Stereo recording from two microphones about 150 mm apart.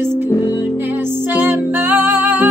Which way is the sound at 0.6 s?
15° right (ahead or behind).